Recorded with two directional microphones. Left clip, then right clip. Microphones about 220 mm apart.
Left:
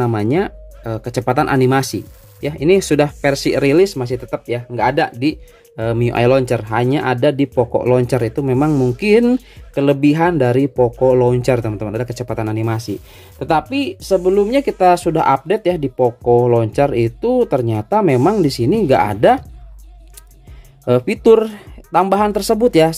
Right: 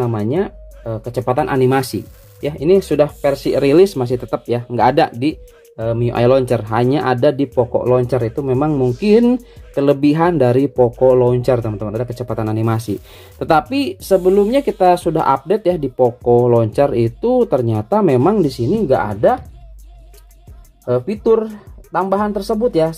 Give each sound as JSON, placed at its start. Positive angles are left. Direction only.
{"t": 0.0, "sound": "speech", "side_deg": 25}
{"t": 3.6, "sound": "speech", "side_deg": 0}
{"t": 5.8, "sound": "speech", "side_deg": 25}
{"t": 11.1, "sound": "speech", "side_deg": 15}
{"t": 12.4, "sound": "speech", "side_deg": 0}
{"t": 18.9, "sound": "speech", "side_deg": 30}
{"t": 20.8, "sound": "speech", "side_deg": 35}